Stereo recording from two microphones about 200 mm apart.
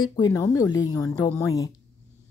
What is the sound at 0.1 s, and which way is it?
Speech, 20° left (ahead or behind).